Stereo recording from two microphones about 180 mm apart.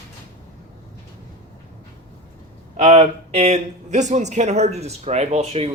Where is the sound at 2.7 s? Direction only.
40° right (ahead or behind).